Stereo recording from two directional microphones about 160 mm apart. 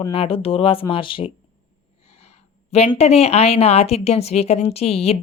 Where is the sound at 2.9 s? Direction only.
40° left (ahead or behind).